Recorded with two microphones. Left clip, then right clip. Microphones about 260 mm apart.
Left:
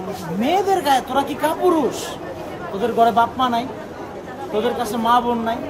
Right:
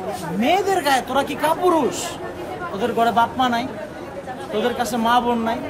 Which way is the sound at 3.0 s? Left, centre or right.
Centre.